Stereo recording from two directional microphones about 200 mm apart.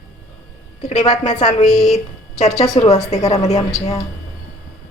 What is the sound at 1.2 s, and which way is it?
Speech, 35° left (ahead or behind).